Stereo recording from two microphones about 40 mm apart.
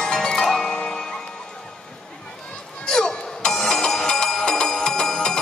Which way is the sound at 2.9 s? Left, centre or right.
Centre.